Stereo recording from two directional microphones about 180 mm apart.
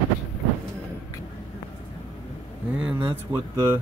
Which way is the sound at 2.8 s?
10° right (ahead or behind).